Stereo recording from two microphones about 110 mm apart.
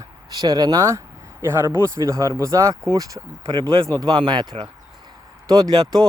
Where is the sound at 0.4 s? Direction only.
35° right (ahead or behind).